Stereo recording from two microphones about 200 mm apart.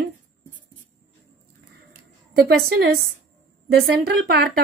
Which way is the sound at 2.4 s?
50° right (ahead or behind).